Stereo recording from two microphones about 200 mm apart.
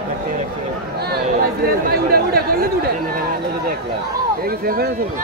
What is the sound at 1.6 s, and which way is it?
Chatter, 50° right (ahead or behind).